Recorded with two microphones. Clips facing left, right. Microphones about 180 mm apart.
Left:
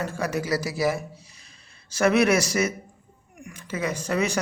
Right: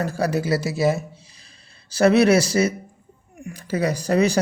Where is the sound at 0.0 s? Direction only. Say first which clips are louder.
Right 5 dB; 35° right (ahead or behind).